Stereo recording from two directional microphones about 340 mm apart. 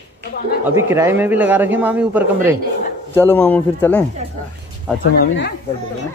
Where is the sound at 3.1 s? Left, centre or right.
Centre.